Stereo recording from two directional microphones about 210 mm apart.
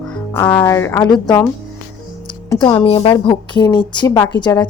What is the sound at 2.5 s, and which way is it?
Speech, 25° left (ahead or behind).